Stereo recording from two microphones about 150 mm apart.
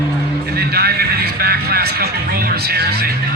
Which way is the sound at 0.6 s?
90° right.